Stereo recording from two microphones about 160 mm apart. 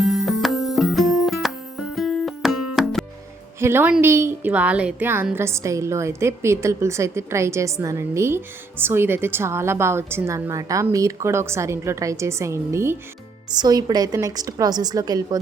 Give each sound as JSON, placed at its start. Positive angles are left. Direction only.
{"t": 0.0, "sound": "music", "side_deg": 0}
{"t": 3.6, "sound": "a woman's voice", "side_deg": -15}